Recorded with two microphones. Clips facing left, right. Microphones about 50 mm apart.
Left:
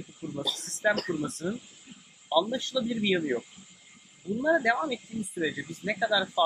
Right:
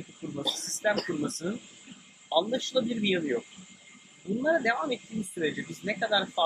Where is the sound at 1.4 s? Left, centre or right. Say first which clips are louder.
Left 1 dB; centre.